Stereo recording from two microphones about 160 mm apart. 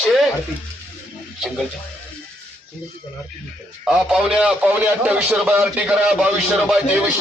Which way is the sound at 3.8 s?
5° right (ahead or behind).